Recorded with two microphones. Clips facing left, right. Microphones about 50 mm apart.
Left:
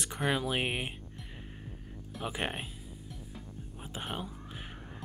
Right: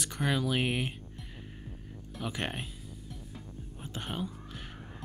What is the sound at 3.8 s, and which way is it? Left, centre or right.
Speech, centre.